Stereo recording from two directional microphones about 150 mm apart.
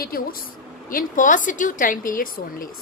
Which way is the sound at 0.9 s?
65° left (ahead or behind).